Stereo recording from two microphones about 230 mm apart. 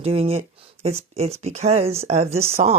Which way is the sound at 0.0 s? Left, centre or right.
Right.